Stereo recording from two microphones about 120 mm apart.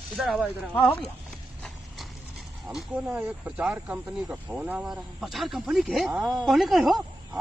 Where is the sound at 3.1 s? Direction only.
10° right (ahead or behind).